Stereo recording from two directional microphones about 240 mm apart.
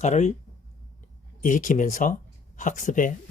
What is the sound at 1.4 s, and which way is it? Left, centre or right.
Speech, left.